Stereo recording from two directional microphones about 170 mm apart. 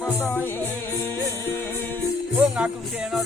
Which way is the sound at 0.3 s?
10° left (ahead or behind).